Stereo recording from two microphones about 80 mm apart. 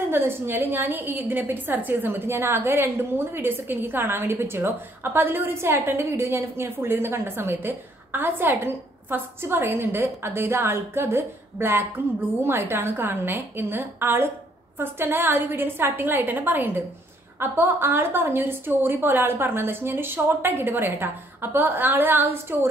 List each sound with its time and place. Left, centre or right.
0.1 s a woman's voice: right